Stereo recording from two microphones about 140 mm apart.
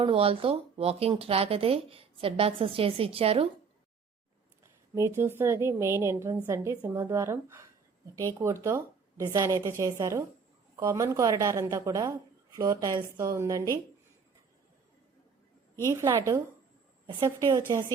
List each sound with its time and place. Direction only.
0.0 s a woman's voice: 40° right (ahead or behind)
4.6 s a woman's voice: 20° right (ahead or behind)
17.1 s a woman's voice: 30° right (ahead or behind)